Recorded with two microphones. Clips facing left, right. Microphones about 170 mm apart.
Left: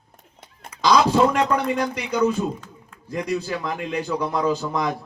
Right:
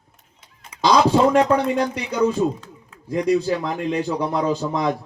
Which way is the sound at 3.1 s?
25° right (ahead or behind).